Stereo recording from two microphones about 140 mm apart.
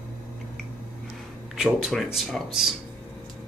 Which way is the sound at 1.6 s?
5° right (ahead or behind).